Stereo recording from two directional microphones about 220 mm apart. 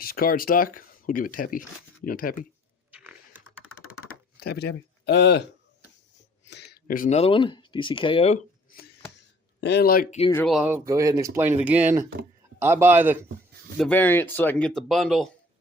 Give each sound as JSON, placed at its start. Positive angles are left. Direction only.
{"t": 0.0, "sound": "speech", "side_deg": 40}
{"t": 2.9, "sound": "a sound", "side_deg": -5}
{"t": 4.4, "sound": "speech", "side_deg": 45}
{"t": 6.4, "sound": "speech", "side_deg": 50}
{"t": 9.6, "sound": "speech", "side_deg": 50}
{"t": 10.3, "sound": "speech", "side_deg": 0}
{"t": 13.7, "sound": "speech", "side_deg": 5}